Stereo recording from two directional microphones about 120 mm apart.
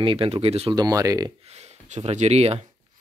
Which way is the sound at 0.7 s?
30° right (ahead or behind).